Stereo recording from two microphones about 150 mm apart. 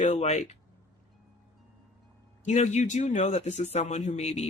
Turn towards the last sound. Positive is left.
turn(degrees=45)  # may be behind; listen again after turning